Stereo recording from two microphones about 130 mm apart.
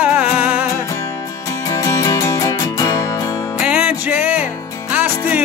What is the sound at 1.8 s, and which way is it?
Music, 25° left (ahead or behind).